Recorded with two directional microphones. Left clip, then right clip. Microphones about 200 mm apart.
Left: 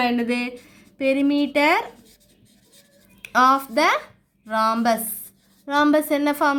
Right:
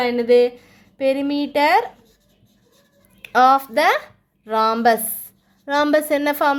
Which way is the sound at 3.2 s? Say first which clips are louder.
Right 3 dB; 20° right (ahead or behind).